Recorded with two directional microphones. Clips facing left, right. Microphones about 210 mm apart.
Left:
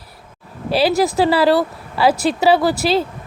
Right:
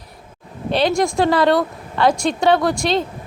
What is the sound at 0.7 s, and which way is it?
Speech, 5° left (ahead or behind).